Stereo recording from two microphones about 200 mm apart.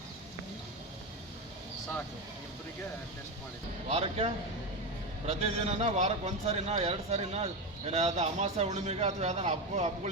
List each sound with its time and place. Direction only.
3.8 s a man's voice: 30° right (ahead or behind)